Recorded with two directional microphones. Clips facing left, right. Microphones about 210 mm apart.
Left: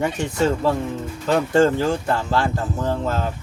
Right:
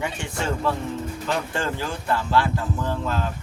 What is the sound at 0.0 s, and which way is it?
Speech, 40° left (ahead or behind).